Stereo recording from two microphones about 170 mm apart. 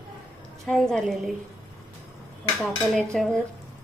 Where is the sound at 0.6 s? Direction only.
5° left (ahead or behind).